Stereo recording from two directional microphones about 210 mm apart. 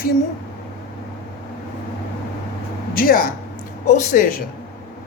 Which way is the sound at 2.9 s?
45° left (ahead or behind).